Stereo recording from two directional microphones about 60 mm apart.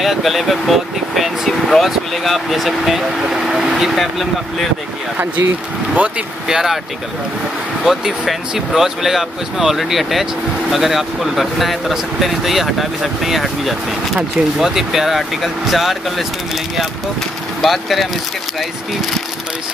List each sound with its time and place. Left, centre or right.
0.0 s speech: centre
5.9 s speech: right
6.4 s speech: centre
7.8 s speech: centre
17.6 s speech: centre